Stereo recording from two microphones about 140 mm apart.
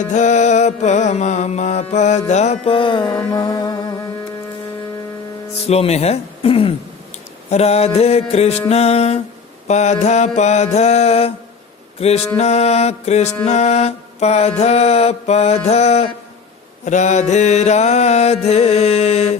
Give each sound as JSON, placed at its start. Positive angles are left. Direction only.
{"t": 0.0, "sound": "music", "side_deg": 60}
{"t": 5.5, "sound": "music", "side_deg": 45}
{"t": 11.9, "sound": "mantra", "side_deg": 45}
{"t": 12.4, "sound": "music", "side_deg": 50}